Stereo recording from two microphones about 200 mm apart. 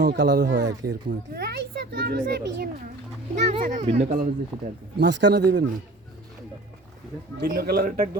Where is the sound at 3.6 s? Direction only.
40° right (ahead or behind).